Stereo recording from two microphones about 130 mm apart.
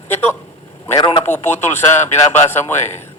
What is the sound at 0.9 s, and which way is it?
Speech, 40° left (ahead or behind).